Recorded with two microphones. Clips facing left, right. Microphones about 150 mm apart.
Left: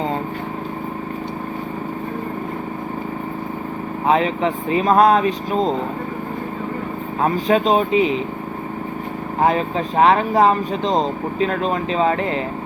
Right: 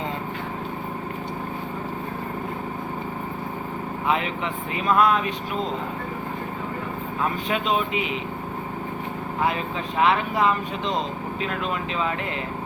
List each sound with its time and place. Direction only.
4.0 s speech: 35° left (ahead or behind)
7.2 s speech: 40° left (ahead or behind)
9.4 s speech: 40° left (ahead or behind)